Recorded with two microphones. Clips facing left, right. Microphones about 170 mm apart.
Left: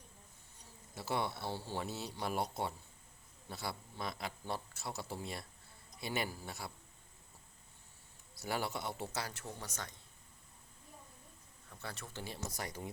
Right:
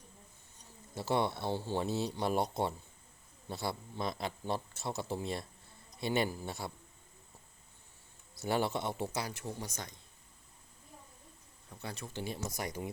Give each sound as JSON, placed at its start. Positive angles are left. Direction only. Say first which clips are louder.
{"t": 0.9, "sound": "a man's voice", "louder": "right 5 dB", "side_deg": -25}
{"t": 8.4, "sound": "a man's voice", "louder": "right 6 dB", "side_deg": -25}
{"t": 11.7, "sound": "a man's voice", "louder": "right 4 dB", "side_deg": -15}